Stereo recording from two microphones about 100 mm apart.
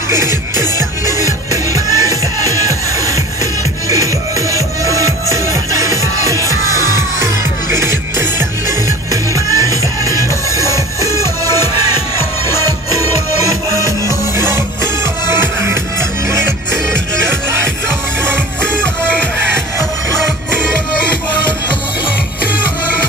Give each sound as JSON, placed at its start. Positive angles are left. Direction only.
{"t": 1.0, "sound": "music", "side_deg": -35}
{"t": 6.4, "sound": "music", "side_deg": 35}
{"t": 7.7, "sound": "music", "side_deg": -25}
{"t": 9.1, "sound": "music", "side_deg": -35}
{"t": 13.7, "sound": "music", "side_deg": 30}
{"t": 15.2, "sound": "music", "side_deg": -20}
{"t": 18.6, "sound": "music", "side_deg": 10}